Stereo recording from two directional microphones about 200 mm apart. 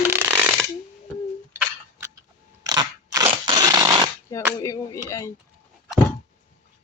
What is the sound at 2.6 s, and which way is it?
Crackle, 20° right (ahead or behind).